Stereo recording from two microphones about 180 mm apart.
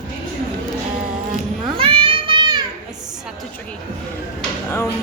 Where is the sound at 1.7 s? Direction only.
30° right (ahead or behind).